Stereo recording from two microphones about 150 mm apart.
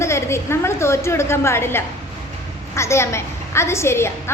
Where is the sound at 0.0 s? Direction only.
20° left (ahead or behind).